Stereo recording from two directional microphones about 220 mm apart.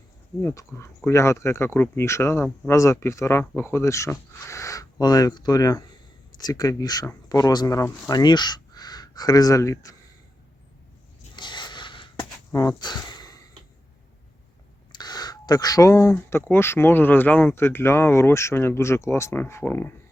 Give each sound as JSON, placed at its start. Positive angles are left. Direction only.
{"t": 0.4, "sound": "speech", "side_deg": 10}
{"t": 11.3, "sound": "a sound", "side_deg": 20}
{"t": 12.5, "sound": "speech", "side_deg": 15}
{"t": 14.9, "sound": "speech", "side_deg": 20}